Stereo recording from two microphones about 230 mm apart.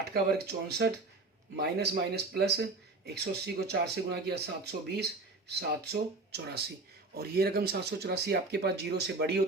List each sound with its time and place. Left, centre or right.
0.1 s speech: right